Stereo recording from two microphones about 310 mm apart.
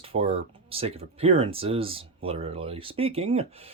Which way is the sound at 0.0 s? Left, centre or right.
Centre.